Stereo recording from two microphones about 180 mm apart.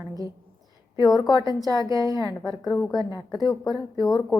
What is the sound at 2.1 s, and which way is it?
Speech, 20° left (ahead or behind).